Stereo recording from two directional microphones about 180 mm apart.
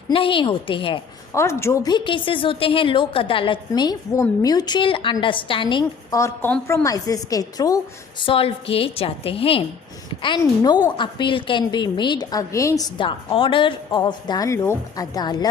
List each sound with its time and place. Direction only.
0.1 s a woman's voice: 30° left (ahead or behind)
1.3 s a woman's voice: 15° left (ahead or behind)
6.8 s a woman's voice: 20° left (ahead or behind)
8.3 s a woman's voice: 30° left (ahead or behind)